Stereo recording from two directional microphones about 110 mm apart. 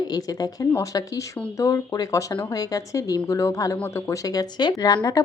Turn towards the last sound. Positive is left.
turn(degrees=40)  # may be behind; listen again after turning